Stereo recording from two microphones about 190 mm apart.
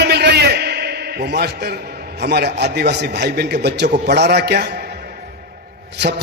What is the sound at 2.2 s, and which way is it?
A man's voice, 60° right (ahead or behind).